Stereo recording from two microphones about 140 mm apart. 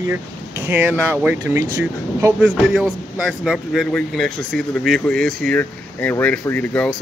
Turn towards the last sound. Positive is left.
turn(degrees=10)  # may be behind; listen again after turning